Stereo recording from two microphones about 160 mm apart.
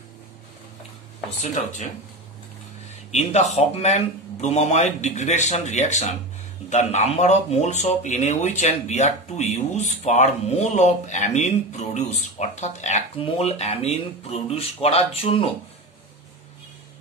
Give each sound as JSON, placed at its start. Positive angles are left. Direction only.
{"t": 1.4, "sound": "speech", "side_deg": 50}
{"t": 3.1, "sound": "speech", "side_deg": 45}